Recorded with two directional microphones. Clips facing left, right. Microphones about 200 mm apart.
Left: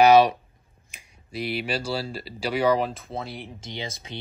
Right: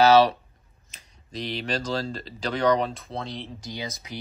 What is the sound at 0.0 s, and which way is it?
Speech, 15° left (ahead or behind).